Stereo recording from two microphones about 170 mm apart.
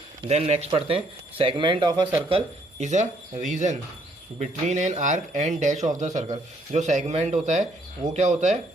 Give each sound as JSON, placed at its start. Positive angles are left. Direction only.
{"t": 0.3, "sound": "speech", "side_deg": -40}
{"t": 2.3, "sound": "speech", "side_deg": -40}